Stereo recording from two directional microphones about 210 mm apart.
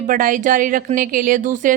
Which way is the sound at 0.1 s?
40° right (ahead or behind).